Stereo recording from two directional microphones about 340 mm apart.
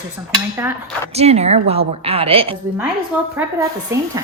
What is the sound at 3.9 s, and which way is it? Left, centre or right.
Speech, centre.